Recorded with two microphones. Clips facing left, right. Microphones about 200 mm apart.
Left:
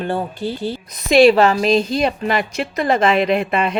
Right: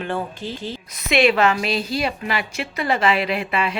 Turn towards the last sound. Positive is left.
turn(degrees=40)  # may be behind; listen again after turning